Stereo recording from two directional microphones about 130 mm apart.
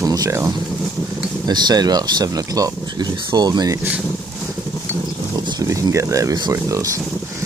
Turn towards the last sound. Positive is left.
turn(degrees=-25)  # may be behind; listen again after turning